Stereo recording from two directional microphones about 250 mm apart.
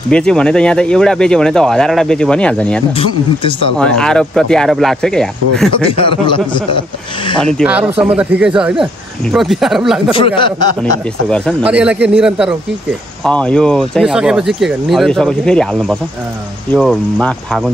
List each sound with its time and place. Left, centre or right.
0.1 s speech: centre
5.9 s speech: left
7.5 s speech: centre
10.1 s speech: centre
10.8 s speech: centre